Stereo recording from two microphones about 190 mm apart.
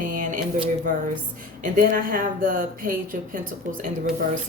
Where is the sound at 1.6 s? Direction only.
45° right (ahead or behind).